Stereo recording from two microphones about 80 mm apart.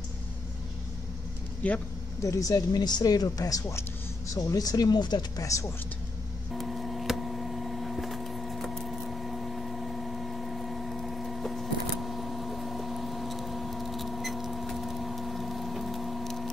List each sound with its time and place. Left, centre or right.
1.6 s speech: centre
2.2 s speech: left
5.4 s speech: left
6.5 s a sound: centre